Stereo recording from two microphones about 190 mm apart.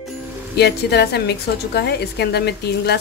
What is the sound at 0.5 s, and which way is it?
A woman's voice, 60° left (ahead or behind).